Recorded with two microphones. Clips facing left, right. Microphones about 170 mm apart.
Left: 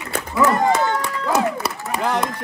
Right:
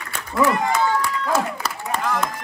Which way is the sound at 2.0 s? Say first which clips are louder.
Left 4 dB; 30° left (ahead or behind).